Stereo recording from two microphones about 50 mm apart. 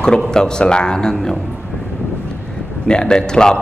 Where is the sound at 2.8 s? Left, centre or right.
Centre.